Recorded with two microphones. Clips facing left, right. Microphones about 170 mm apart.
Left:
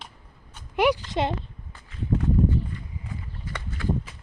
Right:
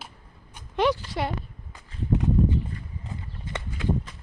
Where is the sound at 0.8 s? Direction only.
15° left (ahead or behind).